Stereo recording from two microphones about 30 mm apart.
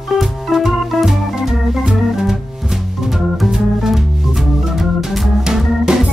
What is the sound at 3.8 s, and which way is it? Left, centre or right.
Music, centre.